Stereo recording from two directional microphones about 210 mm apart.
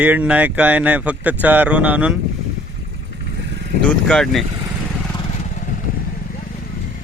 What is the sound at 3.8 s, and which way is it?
Speech, 5° left (ahead or behind).